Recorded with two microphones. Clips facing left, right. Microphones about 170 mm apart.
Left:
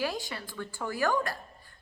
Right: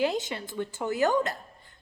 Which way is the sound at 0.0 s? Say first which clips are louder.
Right 6 dB; 20° right (ahead or behind).